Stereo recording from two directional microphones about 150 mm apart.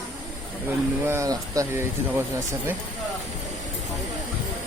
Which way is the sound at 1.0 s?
20° right (ahead or behind).